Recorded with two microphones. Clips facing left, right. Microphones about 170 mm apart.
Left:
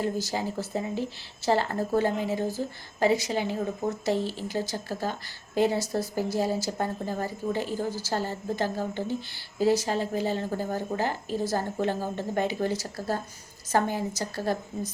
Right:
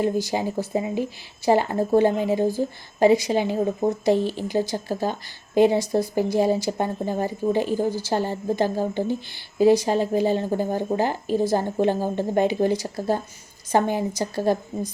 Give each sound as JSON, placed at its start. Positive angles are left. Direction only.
{"t": 0.0, "sound": "a woman's voice", "side_deg": -15}